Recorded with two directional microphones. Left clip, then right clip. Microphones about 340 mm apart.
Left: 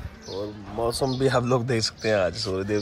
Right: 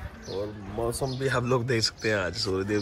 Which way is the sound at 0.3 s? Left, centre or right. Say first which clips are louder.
Left 1 dB; centre.